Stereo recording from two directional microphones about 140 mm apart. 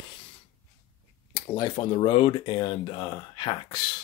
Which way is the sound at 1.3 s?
30° left (ahead or behind).